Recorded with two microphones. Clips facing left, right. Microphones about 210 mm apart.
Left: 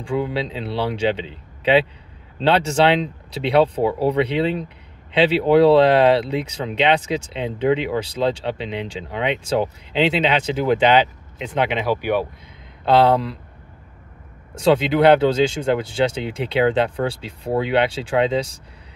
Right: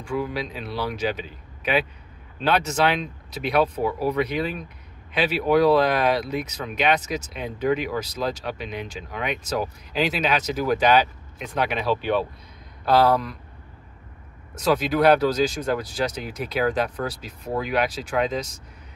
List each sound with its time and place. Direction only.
0.0 s speech: 30° left (ahead or behind)
12.8 s speech: 25° left (ahead or behind)
14.5 s speech: 25° left (ahead or behind)